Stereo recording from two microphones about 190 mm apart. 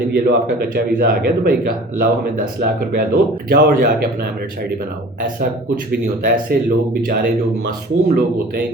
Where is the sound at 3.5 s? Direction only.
50° right (ahead or behind).